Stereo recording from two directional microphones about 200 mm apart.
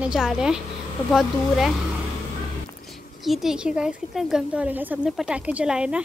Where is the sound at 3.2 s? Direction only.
Centre (ahead or behind).